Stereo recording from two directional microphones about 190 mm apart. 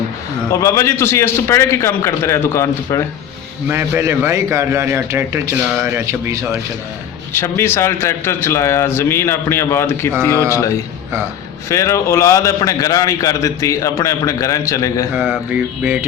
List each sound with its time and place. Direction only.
0.5 s a man's voice: 15° left (ahead or behind)
3.7 s a man's voice: 10° right (ahead or behind)
7.3 s a man's voice: 15° left (ahead or behind)
11.7 s a man's voice: 15° left (ahead or behind)
15.1 s a man's voice: 5° right (ahead or behind)